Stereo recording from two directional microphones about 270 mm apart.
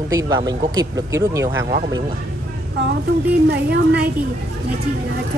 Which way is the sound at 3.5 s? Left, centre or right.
Right.